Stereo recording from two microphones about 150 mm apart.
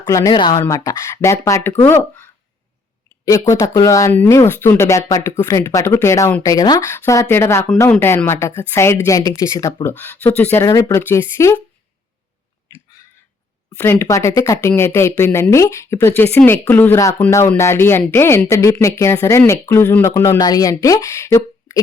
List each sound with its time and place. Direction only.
0.0 s speech: 20° left (ahead or behind)
0.3 s speech: 35° left (ahead or behind)
0.6 s speech: 20° left (ahead or behind)
13.7 s speech: 15° left (ahead or behind)